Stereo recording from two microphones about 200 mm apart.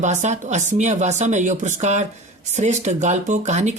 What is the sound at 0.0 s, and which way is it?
Speech, 35° right (ahead or behind).